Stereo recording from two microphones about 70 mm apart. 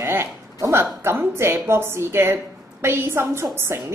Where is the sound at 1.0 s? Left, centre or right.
Right.